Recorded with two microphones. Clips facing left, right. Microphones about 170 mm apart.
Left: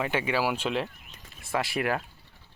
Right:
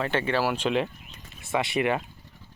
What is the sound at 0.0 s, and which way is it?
Speech, 10° left (ahead or behind).